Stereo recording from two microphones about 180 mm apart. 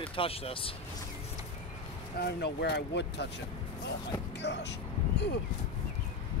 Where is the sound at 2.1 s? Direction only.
65° left (ahead or behind).